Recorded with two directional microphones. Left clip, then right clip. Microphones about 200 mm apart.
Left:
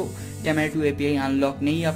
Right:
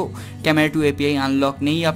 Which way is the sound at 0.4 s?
30° right (ahead or behind).